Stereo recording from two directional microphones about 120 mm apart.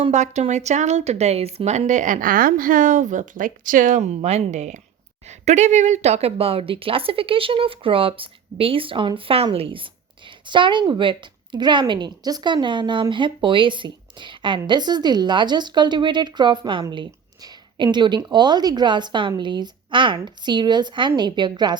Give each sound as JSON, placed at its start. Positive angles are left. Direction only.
{"t": 0.1, "sound": "a woman's voice", "side_deg": -75}
{"t": 16.9, "sound": "a sound", "side_deg": -40}
{"t": 17.9, "sound": "a woman's voice", "side_deg": -40}